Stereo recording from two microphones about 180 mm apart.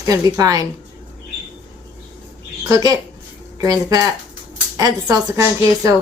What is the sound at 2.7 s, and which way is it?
Speech, 20° right (ahead or behind).